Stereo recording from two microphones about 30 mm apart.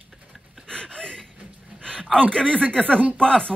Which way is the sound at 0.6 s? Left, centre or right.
Left.